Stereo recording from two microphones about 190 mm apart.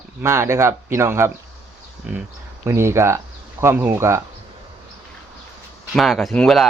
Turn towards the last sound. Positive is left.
turn(degrees=5)  # may be behind; listen again after turning